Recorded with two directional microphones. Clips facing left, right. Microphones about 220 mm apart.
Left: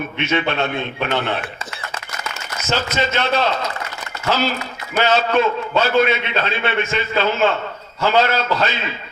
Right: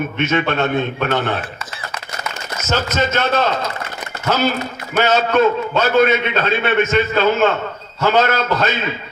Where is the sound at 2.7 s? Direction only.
45° right (ahead or behind).